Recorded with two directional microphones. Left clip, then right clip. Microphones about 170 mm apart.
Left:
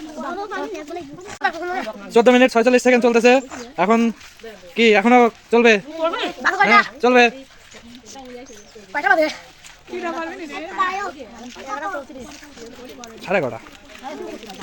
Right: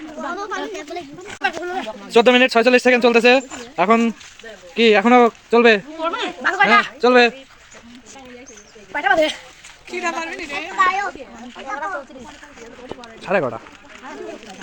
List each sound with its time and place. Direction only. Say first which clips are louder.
0.2 s a woman's voice: right 1 dB; 40° left (ahead or behind)
1.3 s speech: even; 15° right (ahead or behind)
2.0 s speech: even; 5° left (ahead or behind)
6.0 s speech: left 1 dB; 30° left (ahead or behind)
6.4 s speech: right 1 dB; 15° right (ahead or behind)
6.8 s speech: right 1 dB; 5° left (ahead or behind)
8.9 s speech: even; 5° right (ahead or behind)
10.1 s a woman's voice: right 3 dB; 45° left (ahead or behind); by 11.1 s 75° left (ahead or behind)
11.7 s a woman's voice: right 1 dB; 45° left (ahead or behind)
13.0 s bird: right 1 dB; 10° left (ahead or behind)